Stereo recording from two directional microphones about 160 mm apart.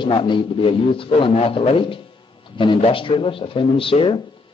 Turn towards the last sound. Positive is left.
turn(degrees=30)  # may be behind; listen again after turning